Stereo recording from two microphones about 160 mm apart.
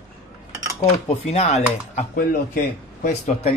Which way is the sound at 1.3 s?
45° left (ahead or behind).